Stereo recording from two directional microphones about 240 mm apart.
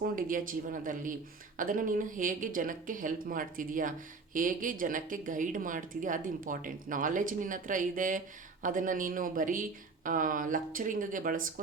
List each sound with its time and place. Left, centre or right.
0.2 s speech: right